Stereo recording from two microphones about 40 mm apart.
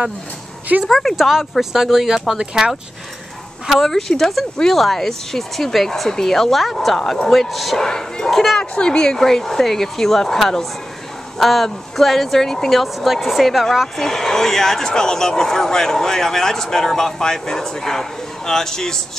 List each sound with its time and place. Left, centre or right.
0.8 s a woman's voice: centre
1.1 s speech: centre
3.7 s a woman's voice: centre
7.8 s speech: centre
8.3 s a woman's voice: centre
8.5 s a woman's voice: centre
13.9 s speech: centre